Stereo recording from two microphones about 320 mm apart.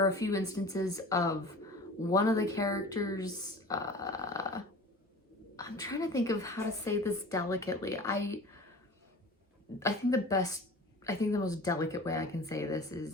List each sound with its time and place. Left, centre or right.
0.0 s a woman's voice: centre
9.8 s a woman's voice: centre